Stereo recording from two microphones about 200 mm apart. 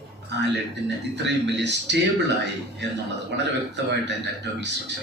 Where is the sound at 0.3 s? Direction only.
60° right (ahead or behind).